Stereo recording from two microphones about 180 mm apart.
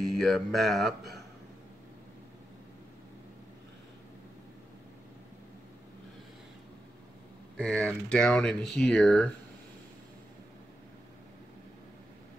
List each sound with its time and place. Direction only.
0.0 s speech: centre (ahead or behind)
7.5 s speech: 5° left (ahead or behind)